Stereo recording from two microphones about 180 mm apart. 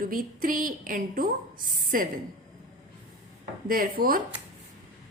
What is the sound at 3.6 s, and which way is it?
Speech, 50° right (ahead or behind).